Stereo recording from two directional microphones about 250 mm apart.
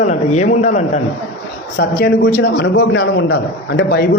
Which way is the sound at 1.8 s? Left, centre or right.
Left.